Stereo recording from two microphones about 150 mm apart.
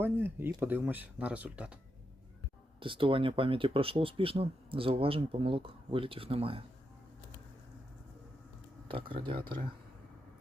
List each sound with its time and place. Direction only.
0.0 s speech: 15° right (ahead or behind)
2.8 s speech: 35° right (ahead or behind)
8.9 s speech: 35° right (ahead or behind)